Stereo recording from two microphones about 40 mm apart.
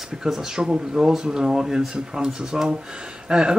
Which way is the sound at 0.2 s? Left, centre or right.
Centre.